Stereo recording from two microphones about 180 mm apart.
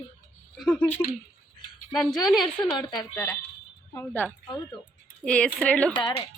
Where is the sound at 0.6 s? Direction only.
5° left (ahead or behind).